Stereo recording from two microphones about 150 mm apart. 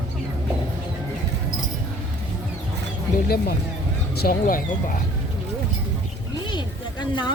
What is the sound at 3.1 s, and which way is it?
Speech, 90° left.